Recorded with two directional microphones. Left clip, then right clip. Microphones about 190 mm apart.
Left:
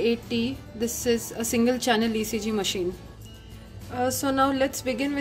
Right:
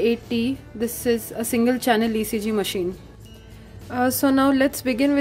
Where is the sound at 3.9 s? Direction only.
30° right (ahead or behind).